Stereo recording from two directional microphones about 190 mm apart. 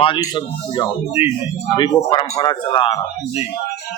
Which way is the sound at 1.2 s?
10° right (ahead or behind).